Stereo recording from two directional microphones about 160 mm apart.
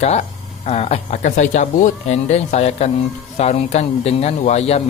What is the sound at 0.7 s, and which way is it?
Speech, 40° left (ahead or behind).